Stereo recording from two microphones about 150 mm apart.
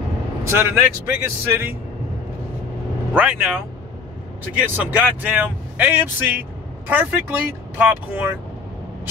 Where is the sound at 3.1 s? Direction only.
10° right (ahead or behind).